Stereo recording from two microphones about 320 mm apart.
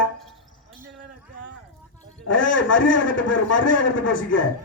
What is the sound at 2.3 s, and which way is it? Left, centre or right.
A man's voice, left.